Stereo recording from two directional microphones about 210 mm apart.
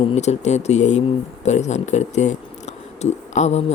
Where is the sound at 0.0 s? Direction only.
30° left (ahead or behind).